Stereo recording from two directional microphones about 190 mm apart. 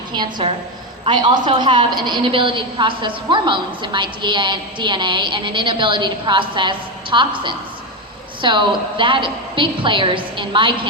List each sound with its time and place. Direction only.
0.1 s a woman's voice: 25° right (ahead or behind)